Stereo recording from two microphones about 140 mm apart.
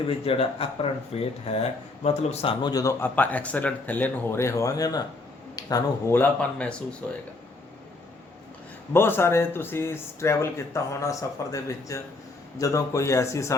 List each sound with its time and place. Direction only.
0.1 s speech: 40° left (ahead or behind)
3.0 s speech: 10° left (ahead or behind)
6.1 s speech: 10° left (ahead or behind)
8.9 s speech: 15° left (ahead or behind)